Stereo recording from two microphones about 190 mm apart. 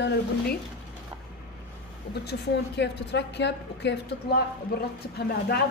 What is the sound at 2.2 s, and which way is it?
A woman's voice, 60° left (ahead or behind).